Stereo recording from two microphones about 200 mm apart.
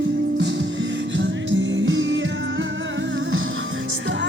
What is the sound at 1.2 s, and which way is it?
Music, 65° right (ahead or behind).